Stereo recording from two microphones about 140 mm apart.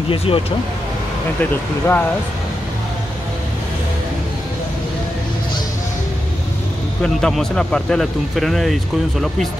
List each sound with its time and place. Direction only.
0.1 s speech: 40° left (ahead or behind)
1.4 s speech: 10° left (ahead or behind)
7.0 s speech: 5° left (ahead or behind)